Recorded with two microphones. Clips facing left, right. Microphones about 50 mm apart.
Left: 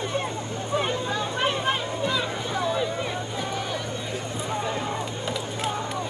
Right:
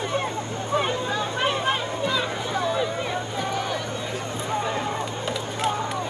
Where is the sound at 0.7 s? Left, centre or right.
Centre.